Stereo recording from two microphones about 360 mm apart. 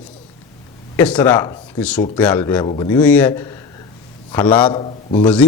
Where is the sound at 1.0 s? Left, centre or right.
Centre.